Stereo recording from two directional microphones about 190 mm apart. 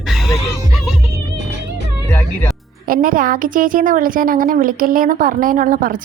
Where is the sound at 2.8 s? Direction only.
45° right (ahead or behind).